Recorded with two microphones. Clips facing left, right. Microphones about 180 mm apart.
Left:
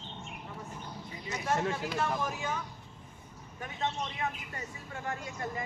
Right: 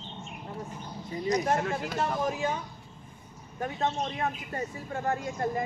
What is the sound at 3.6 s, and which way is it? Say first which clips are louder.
Speech: right 5 dB; 45° right (ahead or behind).